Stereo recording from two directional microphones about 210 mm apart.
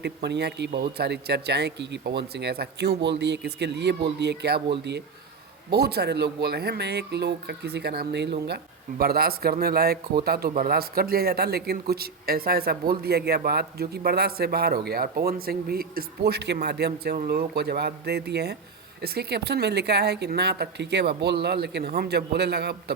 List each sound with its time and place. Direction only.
0.0 s speech: 55° right (ahead or behind)